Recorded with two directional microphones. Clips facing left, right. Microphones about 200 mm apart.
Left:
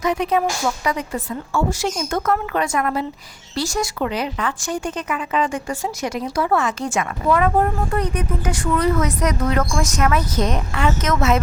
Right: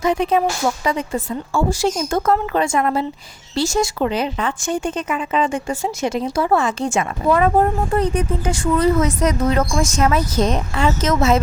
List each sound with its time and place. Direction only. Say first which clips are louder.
0.0 s speech: right 2 dB; 30° right (ahead or behind)